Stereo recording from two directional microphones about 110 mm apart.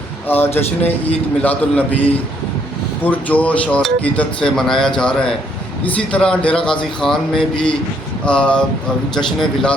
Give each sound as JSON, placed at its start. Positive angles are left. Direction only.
{"t": 0.3, "sound": "speech", "side_deg": 20}
{"t": 3.0, "sound": "speech", "side_deg": 15}